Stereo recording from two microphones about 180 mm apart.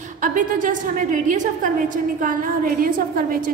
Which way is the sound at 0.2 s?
45° right (ahead or behind).